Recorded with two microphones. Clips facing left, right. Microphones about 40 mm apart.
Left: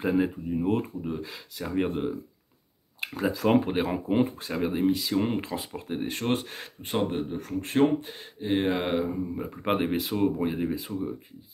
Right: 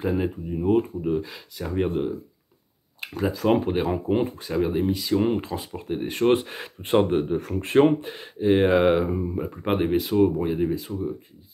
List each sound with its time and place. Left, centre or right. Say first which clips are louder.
0.0 s speech: even; centre
6.8 s speech: right 8 dB; right
7.3 s speech: right 4 dB; right
8.0 s speech: right 10 dB; centre
9.0 s speech: right 4 dB; right
9.3 s speech: right 2 dB; centre